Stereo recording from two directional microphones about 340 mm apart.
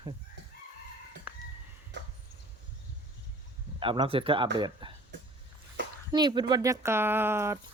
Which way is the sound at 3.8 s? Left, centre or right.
Centre.